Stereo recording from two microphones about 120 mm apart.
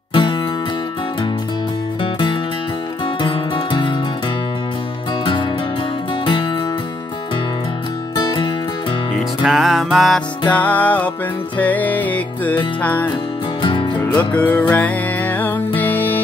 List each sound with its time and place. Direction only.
0.1 s music: 45° left (ahead or behind)
3.2 s music: 40° left (ahead or behind)
8.2 s music: 35° left (ahead or behind)
9.4 s music: centre (ahead or behind)
10.5 s music: 15° left (ahead or behind)
13.6 s music: 45° left (ahead or behind)
13.9 s music: 15° left (ahead or behind)